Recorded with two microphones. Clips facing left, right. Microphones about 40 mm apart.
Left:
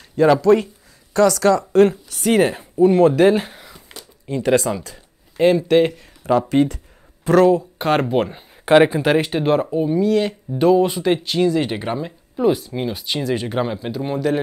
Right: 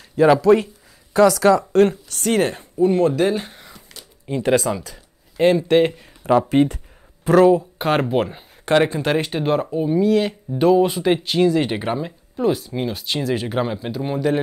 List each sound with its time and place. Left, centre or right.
0.1 s speech: centre
3.4 s a sound: centre
4.3 s speech: centre
6.3 s speech: centre
7.2 s speech: centre
8.6 s speech: centre